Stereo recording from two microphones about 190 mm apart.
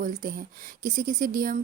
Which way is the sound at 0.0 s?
45° right (ahead or behind).